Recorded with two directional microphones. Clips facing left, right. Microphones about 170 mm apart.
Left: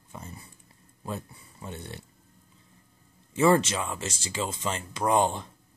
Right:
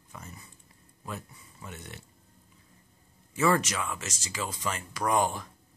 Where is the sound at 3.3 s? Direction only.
25° left (ahead or behind).